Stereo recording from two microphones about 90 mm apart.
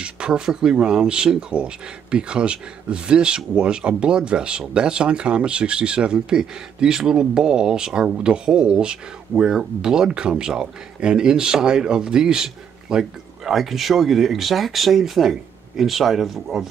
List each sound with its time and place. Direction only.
0.0 s speech: 10° right (ahead or behind)